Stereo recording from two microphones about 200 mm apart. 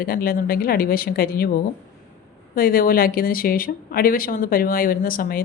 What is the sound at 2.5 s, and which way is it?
Speech, 45° left (ahead or behind).